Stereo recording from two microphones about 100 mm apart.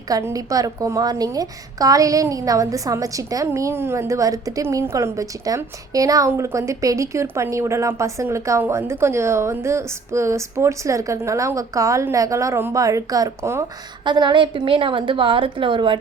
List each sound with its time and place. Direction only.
0.1 s a woman's voice: 30° right (ahead or behind)
14.0 s a woman's voice: 45° right (ahead or behind)